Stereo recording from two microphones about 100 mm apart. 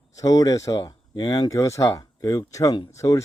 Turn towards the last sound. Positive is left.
turn(degrees=30)  # may be behind; listen again after turning